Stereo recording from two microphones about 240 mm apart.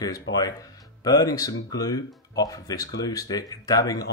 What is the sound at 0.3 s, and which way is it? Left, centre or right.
Speech, centre.